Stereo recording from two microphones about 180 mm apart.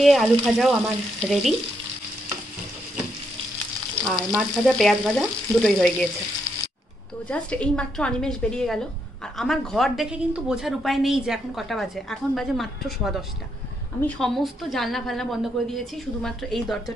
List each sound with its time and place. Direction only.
0.0 s speech: centre (ahead or behind)
4.1 s speech: centre (ahead or behind)
7.2 s speech: 5° left (ahead or behind)